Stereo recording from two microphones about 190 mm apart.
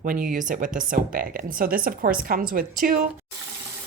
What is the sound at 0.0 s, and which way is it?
Speech, 45° right (ahead or behind).